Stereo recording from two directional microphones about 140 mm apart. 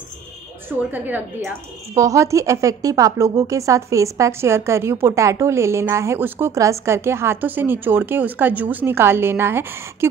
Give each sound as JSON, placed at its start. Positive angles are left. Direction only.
{"t": 0.7, "sound": "a woman's voice", "side_deg": -15}